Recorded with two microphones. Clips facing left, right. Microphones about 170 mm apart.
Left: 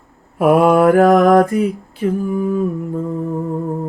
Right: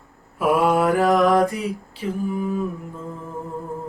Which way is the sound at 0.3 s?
55° left (ahead or behind).